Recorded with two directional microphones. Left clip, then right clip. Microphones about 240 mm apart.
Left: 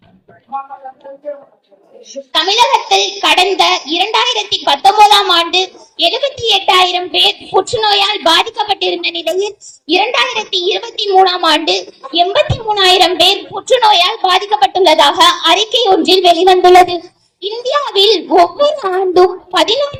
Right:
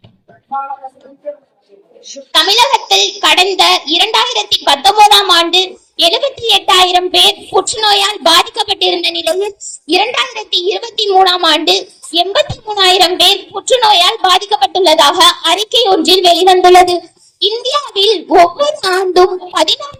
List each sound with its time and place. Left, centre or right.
2.0 s a child's voice: right